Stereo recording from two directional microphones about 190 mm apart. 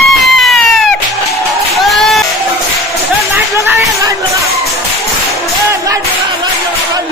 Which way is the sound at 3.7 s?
15° right (ahead or behind).